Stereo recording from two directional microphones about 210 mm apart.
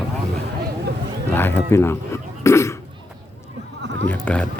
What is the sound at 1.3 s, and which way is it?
Speech, 10° left (ahead or behind).